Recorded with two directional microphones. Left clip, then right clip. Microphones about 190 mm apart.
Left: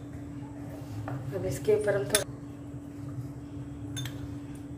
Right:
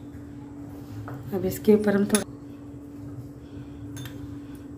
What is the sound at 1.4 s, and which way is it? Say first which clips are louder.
Speech: right 5 dB; 50° right (ahead or behind).